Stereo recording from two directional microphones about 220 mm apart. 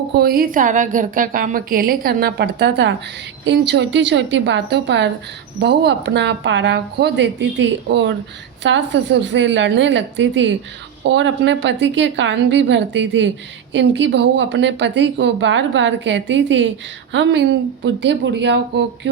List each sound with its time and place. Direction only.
0.1 s a woman's voice: 45° right (ahead or behind)